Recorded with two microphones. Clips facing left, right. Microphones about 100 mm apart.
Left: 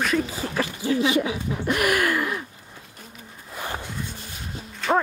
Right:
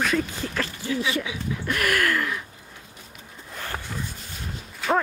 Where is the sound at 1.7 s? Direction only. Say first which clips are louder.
Left 2 dB; 15° left (ahead or behind).